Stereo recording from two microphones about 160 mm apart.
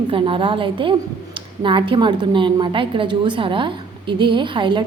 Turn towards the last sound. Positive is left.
turn(degrees=-30)  # may be behind; listen again after turning